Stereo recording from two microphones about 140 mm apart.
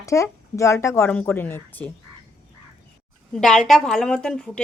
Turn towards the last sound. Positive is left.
turn(degrees=5)  # may be behind; listen again after turning